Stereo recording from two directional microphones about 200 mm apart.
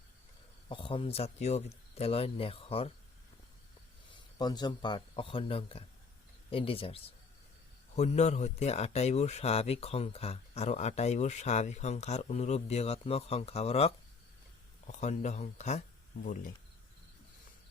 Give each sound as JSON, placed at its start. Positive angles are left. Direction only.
{"t": 0.7, "sound": "speech", "side_deg": 25}
{"t": 4.1, "sound": "speech", "side_deg": 20}